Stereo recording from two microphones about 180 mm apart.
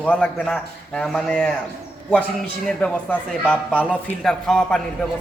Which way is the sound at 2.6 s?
5° left (ahead or behind).